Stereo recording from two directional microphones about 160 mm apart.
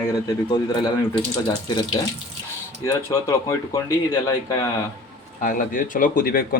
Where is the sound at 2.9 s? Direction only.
20° left (ahead or behind).